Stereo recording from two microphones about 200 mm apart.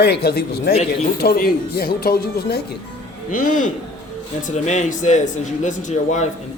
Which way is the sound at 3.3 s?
40° left (ahead or behind).